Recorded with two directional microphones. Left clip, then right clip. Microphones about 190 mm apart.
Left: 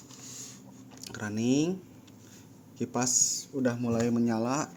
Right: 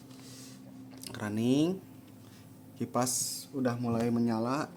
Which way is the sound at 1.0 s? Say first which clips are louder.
Left 1 dB; 5° right (ahead or behind).